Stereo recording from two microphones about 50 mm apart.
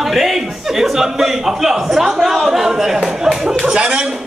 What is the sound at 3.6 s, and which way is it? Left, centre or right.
Speech, centre.